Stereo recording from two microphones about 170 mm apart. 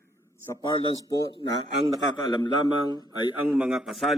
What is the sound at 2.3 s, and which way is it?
Speech, 25° left (ahead or behind).